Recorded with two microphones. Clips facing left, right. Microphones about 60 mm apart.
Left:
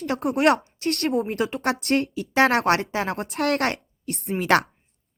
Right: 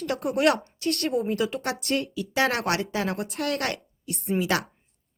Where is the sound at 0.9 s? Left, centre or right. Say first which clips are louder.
Left 2 dB; left.